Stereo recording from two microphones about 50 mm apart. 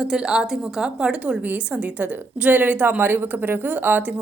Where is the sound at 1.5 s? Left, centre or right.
Right.